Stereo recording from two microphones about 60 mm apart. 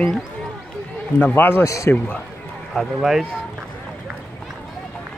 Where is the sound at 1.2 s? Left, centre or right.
Left.